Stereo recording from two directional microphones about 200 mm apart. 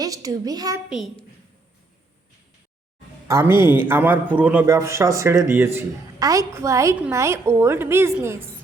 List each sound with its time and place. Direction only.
0.0 s a man's voice: 15° right (ahead or behind)
0.9 s a child's voice: centre (ahead or behind)
3.2 s a man's voice: 15° right (ahead or behind)